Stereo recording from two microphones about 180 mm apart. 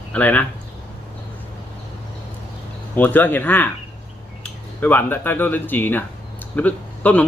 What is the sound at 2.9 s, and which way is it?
Speech, 10° left (ahead or behind).